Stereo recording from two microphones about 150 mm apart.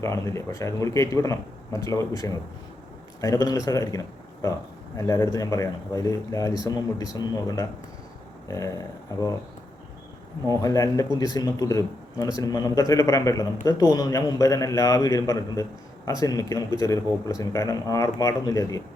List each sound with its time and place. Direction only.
0.0 s speech: 20° left (ahead or behind)
9.1 s speech: 20° left (ahead or behind)
10.5 s speech: 25° left (ahead or behind)